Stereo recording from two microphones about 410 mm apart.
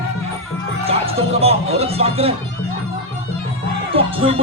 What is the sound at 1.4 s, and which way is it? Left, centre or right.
Music, centre.